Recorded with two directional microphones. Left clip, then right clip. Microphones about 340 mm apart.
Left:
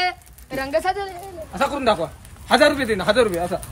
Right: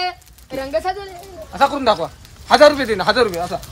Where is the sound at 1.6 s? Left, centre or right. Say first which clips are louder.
Right 4 dB; centre.